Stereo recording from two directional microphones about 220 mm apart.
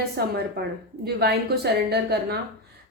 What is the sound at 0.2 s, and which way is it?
A woman's voice, 45° right (ahead or behind).